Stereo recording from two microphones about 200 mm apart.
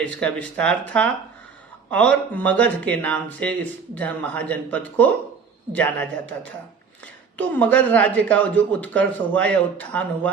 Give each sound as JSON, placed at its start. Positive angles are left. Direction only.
{"t": 0.2, "sound": "speech", "side_deg": 5}
{"t": 7.3, "sound": "speech", "side_deg": 5}